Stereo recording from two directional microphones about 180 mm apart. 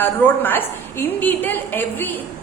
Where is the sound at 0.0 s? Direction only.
10° left (ahead or behind).